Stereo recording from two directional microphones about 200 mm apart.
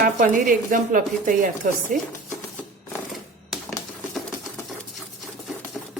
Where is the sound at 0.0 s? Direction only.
40° right (ahead or behind).